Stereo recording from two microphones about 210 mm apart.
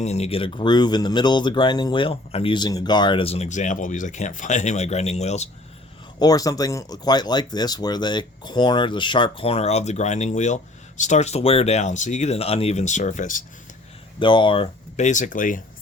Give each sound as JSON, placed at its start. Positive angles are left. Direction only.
{"t": 0.0, "sound": "speech", "side_deg": 30}
{"t": 6.1, "sound": "speech", "side_deg": 15}
{"t": 14.2, "sound": "speech", "side_deg": 20}